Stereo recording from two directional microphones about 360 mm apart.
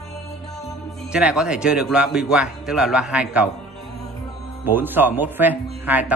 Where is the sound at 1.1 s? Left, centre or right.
Centre.